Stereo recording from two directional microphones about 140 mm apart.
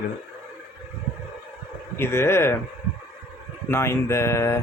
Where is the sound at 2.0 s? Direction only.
20° left (ahead or behind).